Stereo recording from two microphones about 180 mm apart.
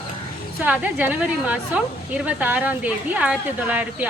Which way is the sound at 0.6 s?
10° right (ahead or behind).